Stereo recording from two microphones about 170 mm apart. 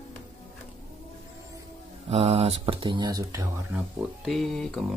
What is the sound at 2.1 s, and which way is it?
Speech, 35° right (ahead or behind).